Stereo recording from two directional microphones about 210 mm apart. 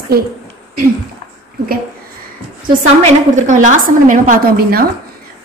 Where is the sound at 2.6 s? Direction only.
35° right (ahead or behind).